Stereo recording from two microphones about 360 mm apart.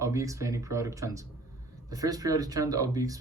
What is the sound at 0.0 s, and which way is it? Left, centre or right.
Speech, centre.